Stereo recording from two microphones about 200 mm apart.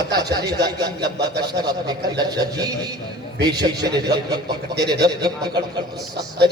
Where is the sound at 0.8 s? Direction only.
55° right (ahead or behind).